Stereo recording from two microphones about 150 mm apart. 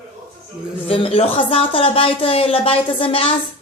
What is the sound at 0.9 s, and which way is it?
Speech, 40° left (ahead or behind).